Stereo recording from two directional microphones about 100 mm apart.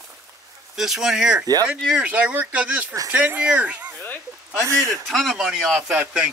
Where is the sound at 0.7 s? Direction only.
5° right (ahead or behind).